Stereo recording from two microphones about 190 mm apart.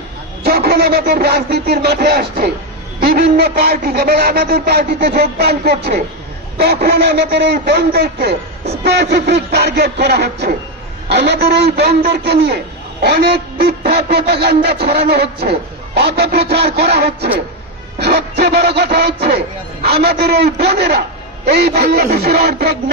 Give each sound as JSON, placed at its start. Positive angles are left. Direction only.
{"t": 0.4, "sound": "speech", "side_deg": -55}
{"t": 6.6, "sound": "speech", "side_deg": -60}